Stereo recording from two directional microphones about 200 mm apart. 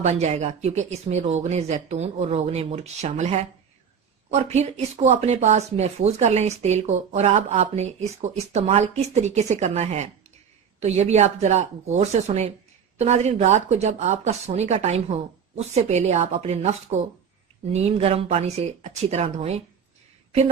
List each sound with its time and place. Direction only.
0.0 s speech: 35° right (ahead or behind)